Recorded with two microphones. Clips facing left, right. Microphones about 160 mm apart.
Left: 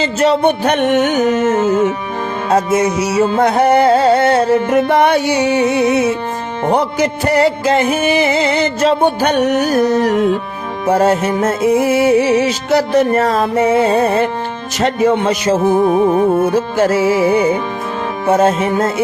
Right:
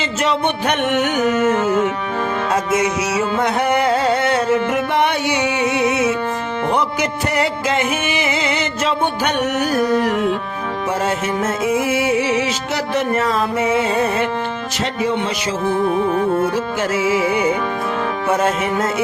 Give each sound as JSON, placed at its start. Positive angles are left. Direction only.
{"t": 0.0, "sound": "music", "side_deg": 35}
{"t": 14.8, "sound": "music", "side_deg": 50}